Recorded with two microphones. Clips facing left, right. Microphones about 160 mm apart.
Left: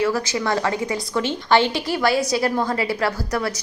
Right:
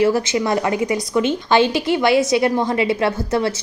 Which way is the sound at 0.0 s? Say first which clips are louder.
Right 5 dB; 25° right (ahead or behind).